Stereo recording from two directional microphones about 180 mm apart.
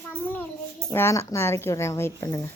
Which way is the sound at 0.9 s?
15° left (ahead or behind).